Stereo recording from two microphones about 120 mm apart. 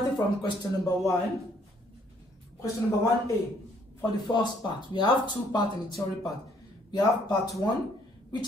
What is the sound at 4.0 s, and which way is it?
Speech, 35° left (ahead or behind).